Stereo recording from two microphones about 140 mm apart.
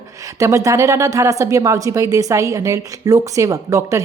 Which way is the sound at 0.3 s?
20° right (ahead or behind).